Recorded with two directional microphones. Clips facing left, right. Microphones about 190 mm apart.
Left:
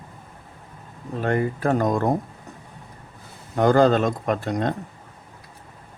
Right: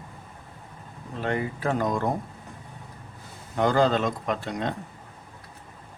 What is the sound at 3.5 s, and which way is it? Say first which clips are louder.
Speech: left 5 dB; 45° left (ahead or behind).